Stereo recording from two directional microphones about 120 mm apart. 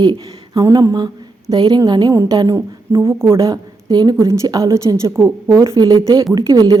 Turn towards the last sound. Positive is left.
turn(degrees=-30)  # may be behind; listen again after turning